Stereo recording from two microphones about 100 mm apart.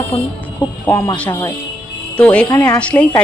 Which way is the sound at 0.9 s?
30° left (ahead or behind).